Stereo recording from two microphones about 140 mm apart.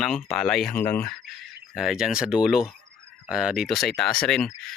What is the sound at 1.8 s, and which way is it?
Speech, 5° right (ahead or behind).